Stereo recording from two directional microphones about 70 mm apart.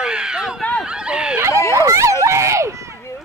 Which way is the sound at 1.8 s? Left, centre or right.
Right.